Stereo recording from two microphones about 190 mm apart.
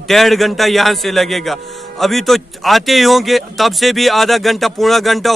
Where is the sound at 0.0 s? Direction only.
Centre (ahead or behind).